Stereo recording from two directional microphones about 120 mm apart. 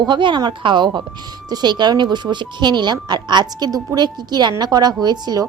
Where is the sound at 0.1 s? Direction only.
40° right (ahead or behind).